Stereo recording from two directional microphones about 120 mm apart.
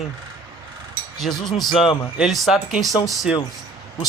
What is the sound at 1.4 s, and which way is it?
Speech, centre (ahead or behind).